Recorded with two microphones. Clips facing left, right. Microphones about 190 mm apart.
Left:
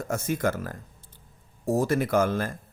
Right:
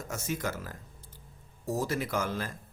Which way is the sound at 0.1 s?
55° left (ahead or behind).